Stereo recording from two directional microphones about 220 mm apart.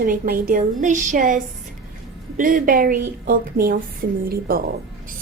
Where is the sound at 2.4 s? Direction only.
40° right (ahead or behind).